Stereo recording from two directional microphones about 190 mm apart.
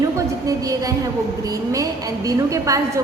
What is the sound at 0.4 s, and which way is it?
A woman's voice, 20° right (ahead or behind).